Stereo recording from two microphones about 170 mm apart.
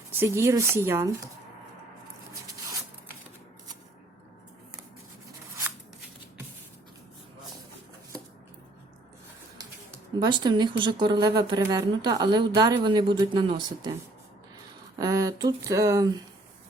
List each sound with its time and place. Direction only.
0.2 s speech: 15° right (ahead or behind)
9.6 s a woman's voice: 25° right (ahead or behind)
14.9 s a woman's voice: 20° right (ahead or behind)